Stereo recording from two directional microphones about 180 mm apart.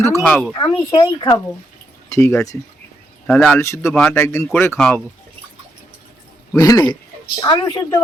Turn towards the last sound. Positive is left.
turn(degrees=25)  # may be behind; listen again after turning